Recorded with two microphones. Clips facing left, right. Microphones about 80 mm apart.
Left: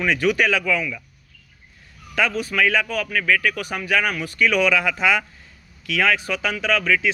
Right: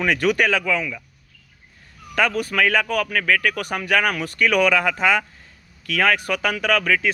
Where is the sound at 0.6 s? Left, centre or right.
Right.